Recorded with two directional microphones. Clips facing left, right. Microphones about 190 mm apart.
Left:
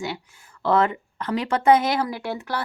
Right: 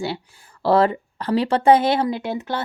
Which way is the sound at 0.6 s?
35° right (ahead or behind).